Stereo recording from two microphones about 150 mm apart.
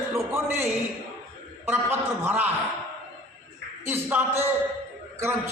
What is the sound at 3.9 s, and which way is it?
Speech, 15° right (ahead or behind).